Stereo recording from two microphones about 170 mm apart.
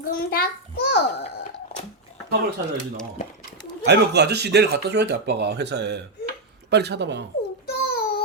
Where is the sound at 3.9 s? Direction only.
80° right.